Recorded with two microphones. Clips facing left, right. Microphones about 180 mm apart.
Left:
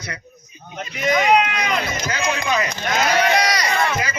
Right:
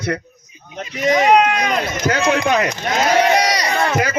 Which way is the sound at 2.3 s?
60° right (ahead or behind).